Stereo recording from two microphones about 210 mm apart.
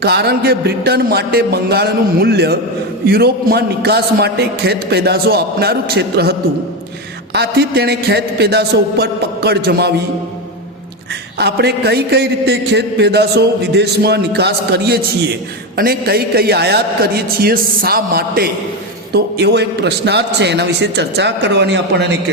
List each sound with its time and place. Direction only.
0.0 s a man's voice: 50° right (ahead or behind)
7.3 s a man's voice: 50° right (ahead or behind)
11.3 s a man's voice: 50° right (ahead or behind)